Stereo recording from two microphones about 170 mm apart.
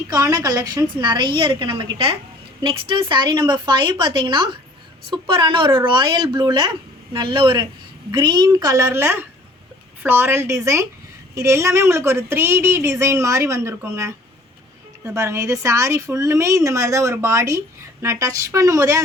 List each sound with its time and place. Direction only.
0.1 s speech: 20° right (ahead or behind)